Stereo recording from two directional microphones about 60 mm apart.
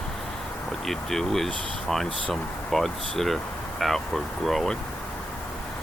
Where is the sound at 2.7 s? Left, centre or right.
Centre.